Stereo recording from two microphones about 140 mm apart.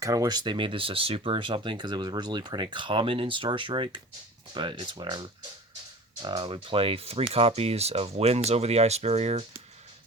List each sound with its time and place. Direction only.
0.0 s speech: 25° right (ahead or behind)
6.2 s speech: 35° right (ahead or behind); by 9.4 s 50° right (ahead or behind)